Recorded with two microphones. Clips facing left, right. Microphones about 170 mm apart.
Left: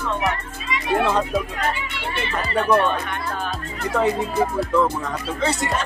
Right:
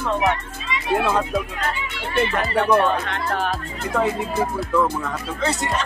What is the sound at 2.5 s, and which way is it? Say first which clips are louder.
Speech: even; 80° right.